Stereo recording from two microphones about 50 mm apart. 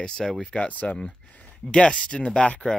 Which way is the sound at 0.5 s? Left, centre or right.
Left.